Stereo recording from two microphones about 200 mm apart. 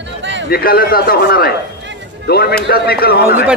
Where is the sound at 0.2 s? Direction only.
65° right (ahead or behind).